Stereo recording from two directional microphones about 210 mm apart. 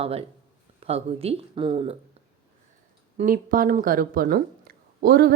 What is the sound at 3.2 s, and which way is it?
Speech, 40° right (ahead or behind).